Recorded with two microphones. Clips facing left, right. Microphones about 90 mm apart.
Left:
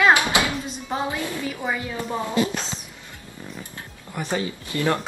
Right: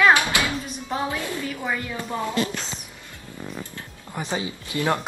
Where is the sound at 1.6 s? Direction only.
10° left (ahead or behind).